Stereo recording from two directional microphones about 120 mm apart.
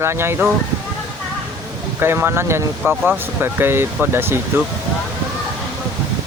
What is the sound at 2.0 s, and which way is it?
Speech, 20° right (ahead or behind).